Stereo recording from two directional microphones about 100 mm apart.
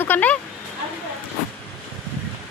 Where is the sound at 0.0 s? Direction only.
15° left (ahead or behind).